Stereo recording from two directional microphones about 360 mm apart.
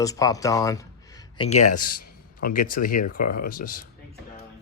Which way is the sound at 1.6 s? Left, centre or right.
Left.